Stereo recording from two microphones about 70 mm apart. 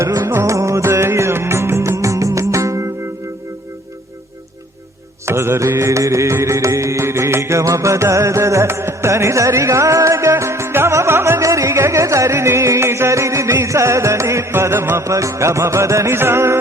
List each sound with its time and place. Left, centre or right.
0.0 s music: right
0.3 s music: right
0.5 s music: right
5.2 s music: right